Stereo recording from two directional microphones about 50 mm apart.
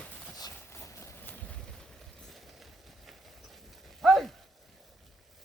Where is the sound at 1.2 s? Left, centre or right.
Left.